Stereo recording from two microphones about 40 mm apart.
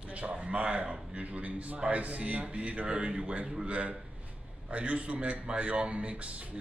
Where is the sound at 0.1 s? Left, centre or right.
Right.